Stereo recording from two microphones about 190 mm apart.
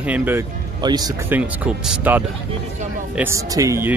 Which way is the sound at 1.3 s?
5° right (ahead or behind).